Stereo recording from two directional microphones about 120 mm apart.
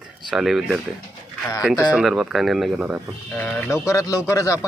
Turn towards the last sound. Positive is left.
turn(degrees=25)  # may be behind; listen again after turning